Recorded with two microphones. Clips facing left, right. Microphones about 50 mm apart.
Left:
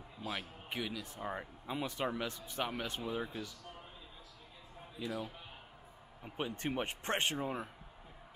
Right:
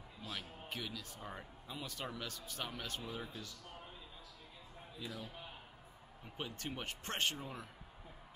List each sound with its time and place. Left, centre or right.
0.2 s a man's voice: left
6.3 s a man's voice: left